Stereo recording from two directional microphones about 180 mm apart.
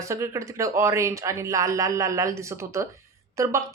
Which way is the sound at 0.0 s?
15° right (ahead or behind).